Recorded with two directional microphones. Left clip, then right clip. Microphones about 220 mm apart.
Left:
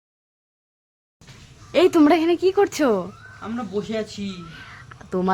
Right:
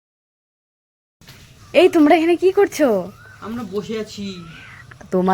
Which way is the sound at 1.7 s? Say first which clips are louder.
Right 4 dB; 10° right (ahead or behind).